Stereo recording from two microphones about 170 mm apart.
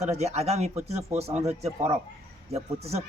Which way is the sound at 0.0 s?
40° right (ahead or behind).